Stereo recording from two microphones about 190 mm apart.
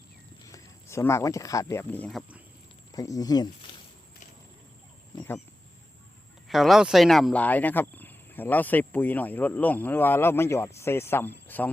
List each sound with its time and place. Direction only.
0.4 s speech: 15° left (ahead or behind)
2.9 s speech: 20° left (ahead or behind)
6.5 s speech: centre (ahead or behind)